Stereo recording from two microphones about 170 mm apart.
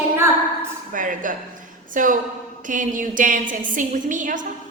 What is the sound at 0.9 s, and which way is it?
A woman's voice, 50° right (ahead or behind).